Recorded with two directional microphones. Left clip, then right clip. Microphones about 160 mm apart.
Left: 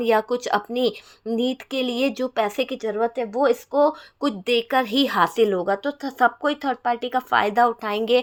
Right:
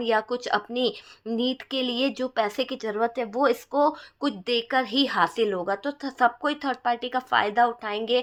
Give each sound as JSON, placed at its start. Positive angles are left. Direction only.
{"t": 0.0, "sound": "speech", "side_deg": 35}